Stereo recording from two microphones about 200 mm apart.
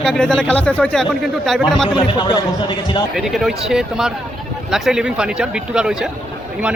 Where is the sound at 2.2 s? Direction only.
20° left (ahead or behind).